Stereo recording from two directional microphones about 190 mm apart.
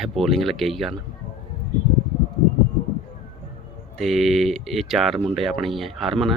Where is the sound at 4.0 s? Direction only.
Centre (ahead or behind).